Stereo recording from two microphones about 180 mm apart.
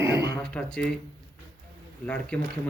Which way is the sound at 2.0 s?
5° left (ahead or behind).